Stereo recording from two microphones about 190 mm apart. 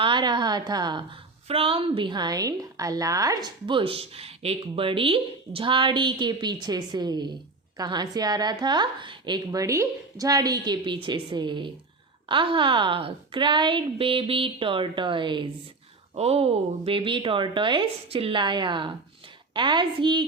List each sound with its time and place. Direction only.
0.0 s a woman's voice: 25° right (ahead or behind)